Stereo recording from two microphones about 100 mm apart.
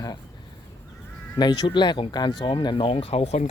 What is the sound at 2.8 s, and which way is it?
Speech, 75° left (ahead or behind).